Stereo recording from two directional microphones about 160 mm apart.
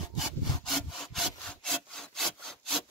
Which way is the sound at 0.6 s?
Centre (ahead or behind).